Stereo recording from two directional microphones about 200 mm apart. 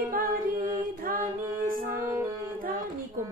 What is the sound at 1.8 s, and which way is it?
Music, 10° right (ahead or behind).